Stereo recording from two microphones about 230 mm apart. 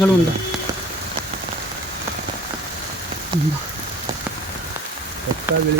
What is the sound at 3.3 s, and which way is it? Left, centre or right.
Speech, centre.